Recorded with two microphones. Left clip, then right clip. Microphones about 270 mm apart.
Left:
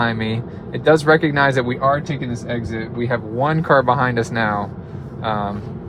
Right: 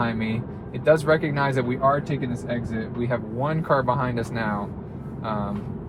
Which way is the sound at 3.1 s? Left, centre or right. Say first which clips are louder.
Left 8 dB; left.